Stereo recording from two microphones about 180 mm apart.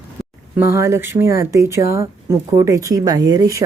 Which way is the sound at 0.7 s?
15° right (ahead or behind).